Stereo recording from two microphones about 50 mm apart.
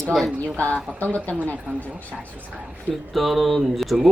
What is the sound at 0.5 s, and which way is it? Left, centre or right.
Speech, left.